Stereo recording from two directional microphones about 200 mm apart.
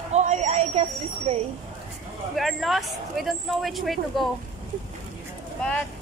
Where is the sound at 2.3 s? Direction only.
Centre (ahead or behind).